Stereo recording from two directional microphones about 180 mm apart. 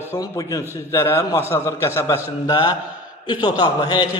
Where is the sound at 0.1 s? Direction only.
20° left (ahead or behind).